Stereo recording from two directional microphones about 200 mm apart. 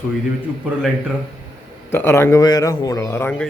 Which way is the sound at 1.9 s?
10° left (ahead or behind).